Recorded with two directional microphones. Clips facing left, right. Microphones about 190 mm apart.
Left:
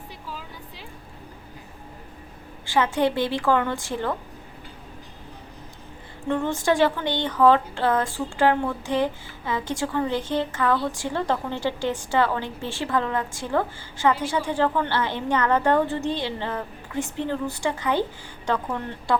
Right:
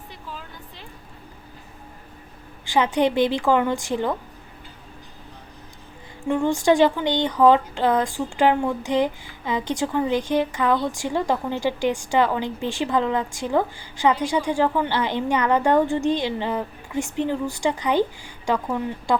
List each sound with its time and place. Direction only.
2.6 s a woman's voice: 15° right (ahead or behind)
6.2 s a woman's voice: 10° right (ahead or behind)